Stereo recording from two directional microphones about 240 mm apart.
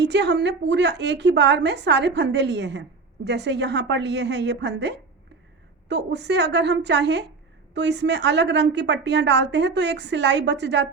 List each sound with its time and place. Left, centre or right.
0.0 s a woman's voice: right